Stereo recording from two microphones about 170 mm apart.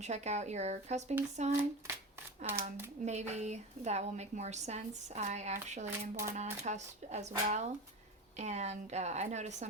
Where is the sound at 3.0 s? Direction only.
40° right (ahead or behind).